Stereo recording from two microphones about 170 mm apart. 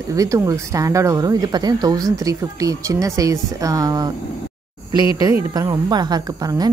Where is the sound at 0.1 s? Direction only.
20° right (ahead or behind).